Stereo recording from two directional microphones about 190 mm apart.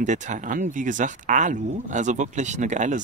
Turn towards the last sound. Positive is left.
turn(degrees=-40)  # may be behind; listen again after turning